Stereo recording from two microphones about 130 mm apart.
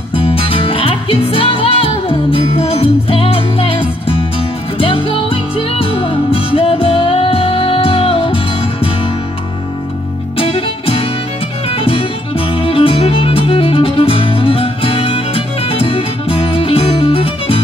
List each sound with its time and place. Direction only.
0.1 s music: 45° left (ahead or behind)
10.3 s music: 45° left (ahead or behind)